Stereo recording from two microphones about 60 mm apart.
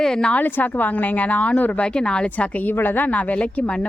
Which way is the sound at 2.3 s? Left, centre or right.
Left.